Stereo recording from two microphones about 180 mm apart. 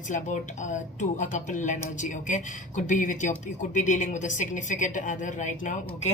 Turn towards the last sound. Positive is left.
turn(degrees=45)  # may be behind; listen again after turning